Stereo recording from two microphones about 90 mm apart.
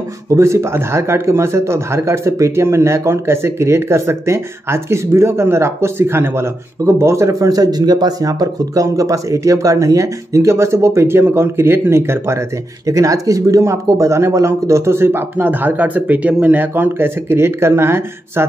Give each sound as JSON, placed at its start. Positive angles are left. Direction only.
{"t": 0.3, "sound": "speech", "side_deg": -35}